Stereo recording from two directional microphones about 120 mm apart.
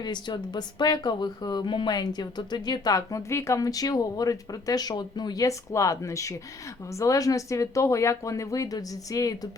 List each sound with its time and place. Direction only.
0.0 s speech: 35° left (ahead or behind)